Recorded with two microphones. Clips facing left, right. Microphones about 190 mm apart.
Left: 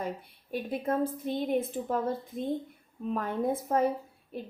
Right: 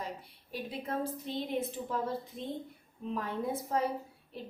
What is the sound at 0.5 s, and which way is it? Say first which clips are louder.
Speech: left 6 dB; 50° left (ahead or behind).